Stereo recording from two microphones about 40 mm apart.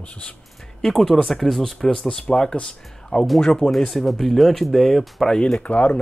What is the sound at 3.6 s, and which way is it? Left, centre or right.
Speech, centre.